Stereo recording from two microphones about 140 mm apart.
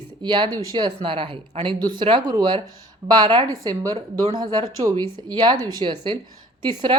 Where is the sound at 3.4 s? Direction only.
25° right (ahead or behind).